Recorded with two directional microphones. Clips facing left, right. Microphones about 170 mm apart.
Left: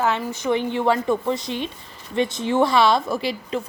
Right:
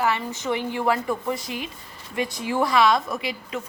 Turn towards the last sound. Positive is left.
turn(degrees=30)  # may be behind; listen again after turning